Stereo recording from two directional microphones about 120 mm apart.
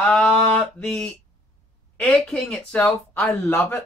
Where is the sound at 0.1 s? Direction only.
5° left (ahead or behind).